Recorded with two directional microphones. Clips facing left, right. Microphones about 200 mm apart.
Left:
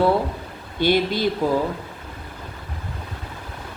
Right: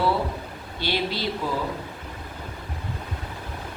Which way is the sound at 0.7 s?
50° left (ahead or behind).